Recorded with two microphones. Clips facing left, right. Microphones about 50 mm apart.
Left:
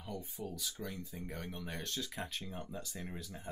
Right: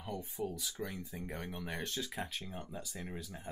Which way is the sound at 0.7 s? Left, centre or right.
Right.